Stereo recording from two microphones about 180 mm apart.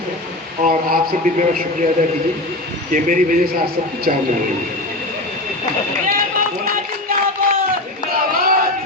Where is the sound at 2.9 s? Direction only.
45° right (ahead or behind).